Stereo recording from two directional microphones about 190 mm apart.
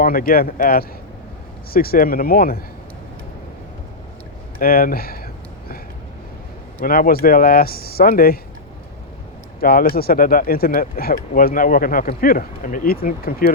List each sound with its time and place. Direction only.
0.0 s speech: 50° left (ahead or behind)
4.6 s speech: 50° left (ahead or behind)
6.8 s speech: 50° left (ahead or behind)
9.6 s speech: 50° left (ahead or behind)